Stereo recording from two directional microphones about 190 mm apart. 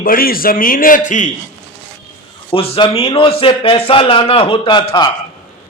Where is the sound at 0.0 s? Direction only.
50° left (ahead or behind).